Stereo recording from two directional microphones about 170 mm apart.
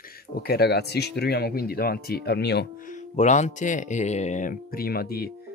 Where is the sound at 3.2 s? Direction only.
45° left (ahead or behind).